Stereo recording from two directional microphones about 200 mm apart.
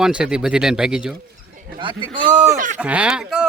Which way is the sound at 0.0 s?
5° right (ahead or behind).